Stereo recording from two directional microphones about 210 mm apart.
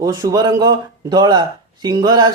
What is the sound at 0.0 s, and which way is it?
Speech, 15° right (ahead or behind).